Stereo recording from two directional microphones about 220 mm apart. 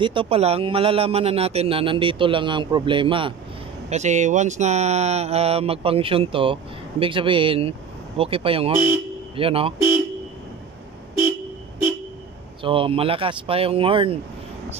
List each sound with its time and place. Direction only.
0.0 s speech: 25° right (ahead or behind)
12.6 s speech: 25° right (ahead or behind)